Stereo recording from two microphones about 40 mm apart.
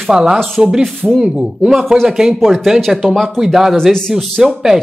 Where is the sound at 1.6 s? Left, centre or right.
Centre.